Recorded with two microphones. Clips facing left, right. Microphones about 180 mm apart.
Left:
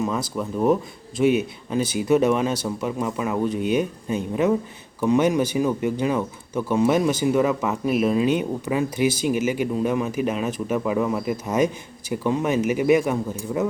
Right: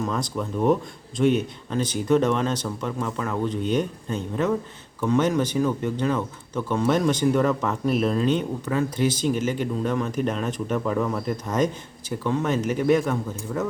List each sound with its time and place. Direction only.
0.0 s speech: 5° left (ahead or behind)